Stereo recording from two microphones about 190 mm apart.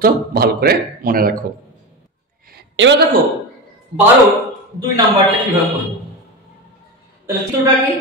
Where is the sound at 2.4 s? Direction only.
65° right (ahead or behind).